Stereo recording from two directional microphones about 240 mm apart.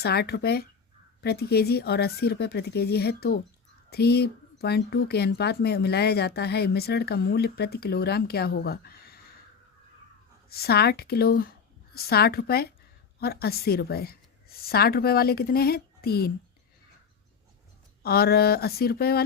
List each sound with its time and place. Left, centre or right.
0.0 s speech: left
10.5 s a woman's voice: left
18.0 s speech: left